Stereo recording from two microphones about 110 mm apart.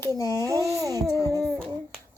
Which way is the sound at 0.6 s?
Centre (ahead or behind).